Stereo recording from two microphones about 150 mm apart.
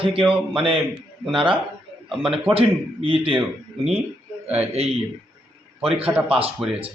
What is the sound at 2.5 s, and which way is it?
Speech, 40° right (ahead or behind).